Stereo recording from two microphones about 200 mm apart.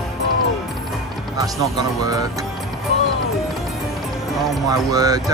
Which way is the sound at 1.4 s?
20° right (ahead or behind).